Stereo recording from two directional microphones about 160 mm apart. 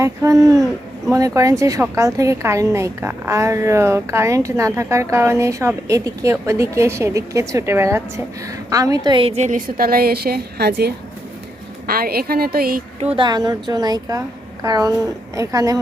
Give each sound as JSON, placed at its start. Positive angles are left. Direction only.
{"t": 0.0, "sound": "a woman's voice", "side_deg": -20}
{"t": 11.9, "sound": "a woman's voice", "side_deg": -70}
{"t": 13.0, "sound": "a woman's voice", "side_deg": -35}